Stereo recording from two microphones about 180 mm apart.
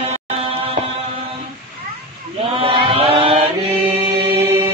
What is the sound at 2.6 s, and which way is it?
Chant, 30° right (ahead or behind).